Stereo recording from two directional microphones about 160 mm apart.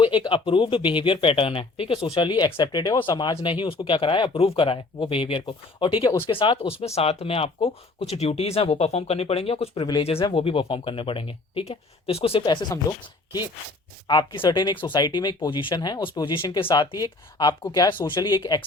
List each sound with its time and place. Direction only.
0.0 s speech: 30° left (ahead or behind)
14.1 s speech: 25° left (ahead or behind)